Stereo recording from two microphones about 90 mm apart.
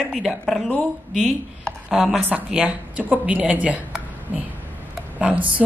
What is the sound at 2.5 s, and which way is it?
Speech, 15° right (ahead or behind).